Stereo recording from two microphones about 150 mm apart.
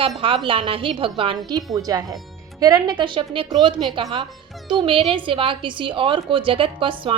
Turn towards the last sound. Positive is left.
turn(degrees=-35)  # may be behind; listen again after turning